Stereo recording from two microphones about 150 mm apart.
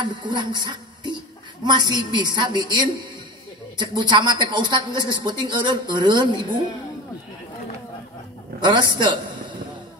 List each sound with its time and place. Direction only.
0.0 s music: 30° right (ahead or behind)
1.6 s a woman's voice: 30° right (ahead or behind)
8.5 s a woman's voice: 30° right (ahead or behind)